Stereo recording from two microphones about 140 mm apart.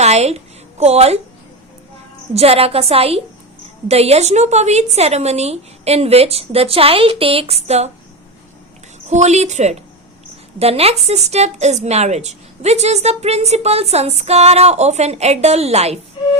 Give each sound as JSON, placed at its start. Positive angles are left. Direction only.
{"t": 0.0, "sound": "a sound", "side_deg": -50}
{"t": 2.3, "sound": "a woman's voice", "side_deg": -45}
{"t": 9.0, "sound": "a woman's voice", "side_deg": -55}